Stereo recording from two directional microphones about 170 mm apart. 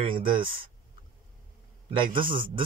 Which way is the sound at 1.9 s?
30° right (ahead or behind).